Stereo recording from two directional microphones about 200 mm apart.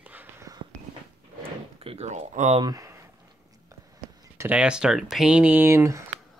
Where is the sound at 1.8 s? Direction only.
30° right (ahead or behind).